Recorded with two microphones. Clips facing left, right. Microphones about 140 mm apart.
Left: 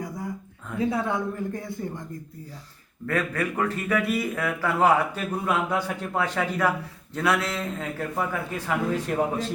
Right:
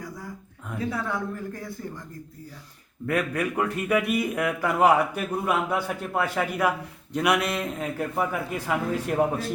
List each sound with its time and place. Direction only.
0.8 s speech: 20° left (ahead or behind)
3.1 s a man's voice: 15° right (ahead or behind)